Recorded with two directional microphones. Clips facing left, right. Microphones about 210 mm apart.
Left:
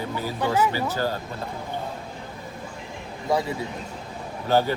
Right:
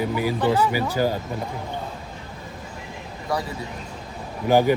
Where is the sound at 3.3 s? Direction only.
25° left (ahead or behind).